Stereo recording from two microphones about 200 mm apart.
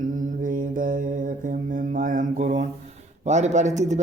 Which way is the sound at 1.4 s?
40° right (ahead or behind).